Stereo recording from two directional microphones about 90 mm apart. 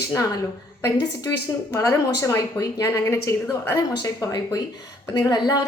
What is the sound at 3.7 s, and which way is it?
A woman's voice, 40° left (ahead or behind).